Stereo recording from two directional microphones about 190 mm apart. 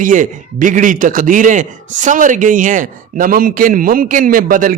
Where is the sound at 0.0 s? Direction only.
45° right (ahead or behind).